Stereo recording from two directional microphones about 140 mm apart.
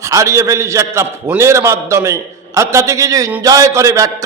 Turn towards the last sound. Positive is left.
turn(degrees=-25)  # may be behind; listen again after turning